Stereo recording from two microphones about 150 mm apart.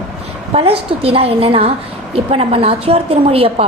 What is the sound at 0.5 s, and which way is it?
A woman's voice, 40° right (ahead or behind).